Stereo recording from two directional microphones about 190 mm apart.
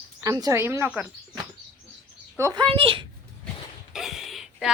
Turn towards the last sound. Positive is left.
turn(degrees=0)  # may be behind; listen again after turning